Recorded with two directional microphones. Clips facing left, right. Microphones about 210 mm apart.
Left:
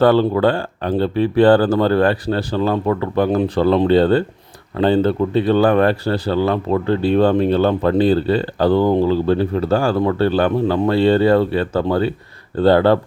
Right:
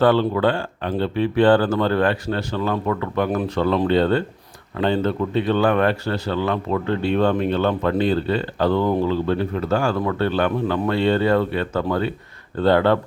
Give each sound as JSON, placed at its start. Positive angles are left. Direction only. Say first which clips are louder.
{"t": 0.0, "sound": "a man's voice", "louder": "left 4 dB", "side_deg": 40}